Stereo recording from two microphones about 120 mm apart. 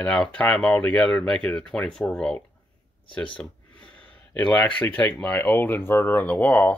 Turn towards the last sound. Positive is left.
turn(degrees=10)  # may be behind; listen again after turning